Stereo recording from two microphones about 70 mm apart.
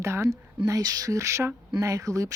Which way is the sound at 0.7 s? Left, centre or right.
Right.